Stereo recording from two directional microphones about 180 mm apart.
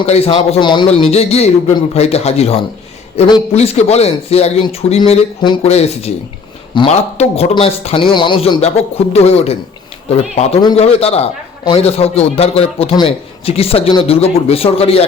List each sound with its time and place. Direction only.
0.0 s a man's voice: 35° left (ahead or behind)